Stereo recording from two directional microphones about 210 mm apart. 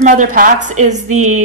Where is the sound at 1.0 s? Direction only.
90° right.